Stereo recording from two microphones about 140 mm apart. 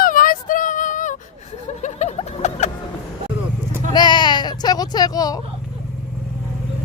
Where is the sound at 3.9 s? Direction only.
30° left (ahead or behind).